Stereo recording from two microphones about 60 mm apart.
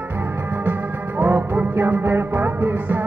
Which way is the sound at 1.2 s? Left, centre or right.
Right.